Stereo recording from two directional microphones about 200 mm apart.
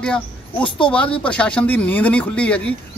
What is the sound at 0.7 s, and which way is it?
Speech, 25° left (ahead or behind).